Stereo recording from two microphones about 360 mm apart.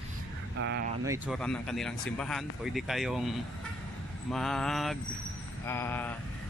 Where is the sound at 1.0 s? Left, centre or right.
Centre.